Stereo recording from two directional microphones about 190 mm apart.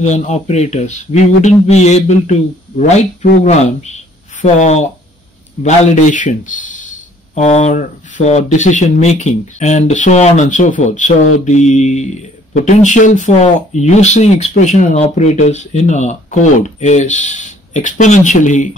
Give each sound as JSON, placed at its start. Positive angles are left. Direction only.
{"t": 0.0, "sound": "speech", "side_deg": 35}